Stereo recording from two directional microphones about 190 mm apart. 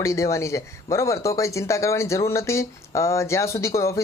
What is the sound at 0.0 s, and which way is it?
Speech, 15° left (ahead or behind).